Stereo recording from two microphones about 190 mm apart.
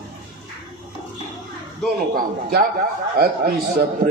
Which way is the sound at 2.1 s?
50° right (ahead or behind).